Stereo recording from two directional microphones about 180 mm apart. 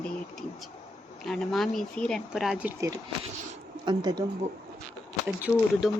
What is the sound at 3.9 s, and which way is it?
Speech, 25° right (ahead or behind).